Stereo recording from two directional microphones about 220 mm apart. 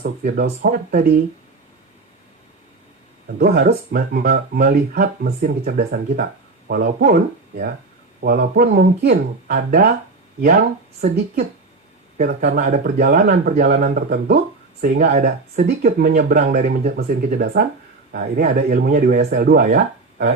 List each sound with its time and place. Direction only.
0.0 s speech: 40° right (ahead or behind)
3.3 s speech: 45° right (ahead or behind)
8.2 s speech: 45° right (ahead or behind)
12.1 s speech: 40° right (ahead or behind)